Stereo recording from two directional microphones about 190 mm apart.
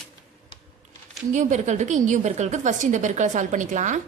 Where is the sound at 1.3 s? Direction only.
40° right (ahead or behind).